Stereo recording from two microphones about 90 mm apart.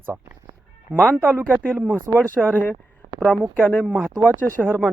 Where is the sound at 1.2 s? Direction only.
25° right (ahead or behind).